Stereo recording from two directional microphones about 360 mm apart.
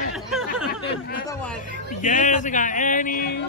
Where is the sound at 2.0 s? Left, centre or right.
Left.